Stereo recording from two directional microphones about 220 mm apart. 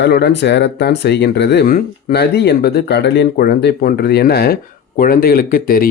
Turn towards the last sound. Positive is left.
turn(degrees=40)  # may be behind; listen again after turning